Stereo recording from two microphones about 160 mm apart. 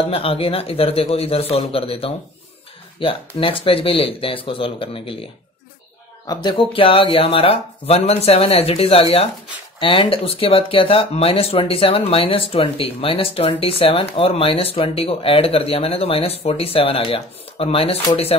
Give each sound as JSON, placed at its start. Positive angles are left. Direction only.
{"t": 0.1, "sound": "speech", "side_deg": 35}